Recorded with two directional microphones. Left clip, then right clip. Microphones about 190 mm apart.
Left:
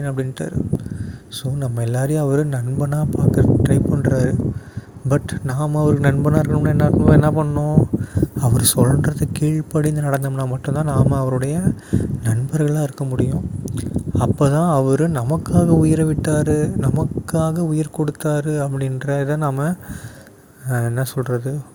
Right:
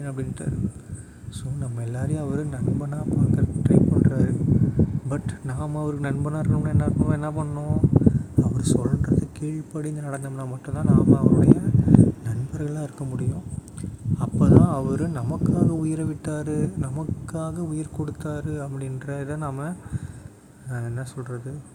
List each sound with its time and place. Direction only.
0.0 s speech: 35° left (ahead or behind)
1.5 s speech: 40° left (ahead or behind)
20.7 s speech: 40° left (ahead or behind)